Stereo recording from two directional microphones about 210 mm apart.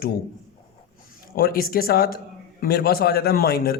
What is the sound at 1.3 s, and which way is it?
Speech, 45° left (ahead or behind).